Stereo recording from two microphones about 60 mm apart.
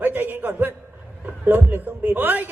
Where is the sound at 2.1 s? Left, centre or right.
Right.